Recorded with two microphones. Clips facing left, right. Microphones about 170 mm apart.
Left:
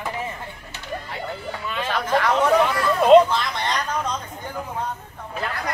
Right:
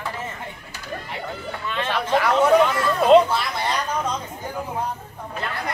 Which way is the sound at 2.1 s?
10° right (ahead or behind).